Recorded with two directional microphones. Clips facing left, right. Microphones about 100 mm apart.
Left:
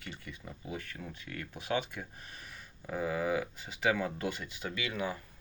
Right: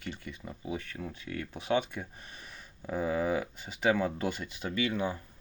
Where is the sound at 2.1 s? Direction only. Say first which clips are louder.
Right 1 dB; 20° right (ahead or behind).